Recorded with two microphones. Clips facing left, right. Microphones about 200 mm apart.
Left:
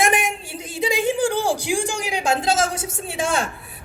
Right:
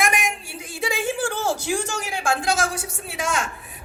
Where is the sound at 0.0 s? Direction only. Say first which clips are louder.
Left 4 dB; 25° left (ahead or behind).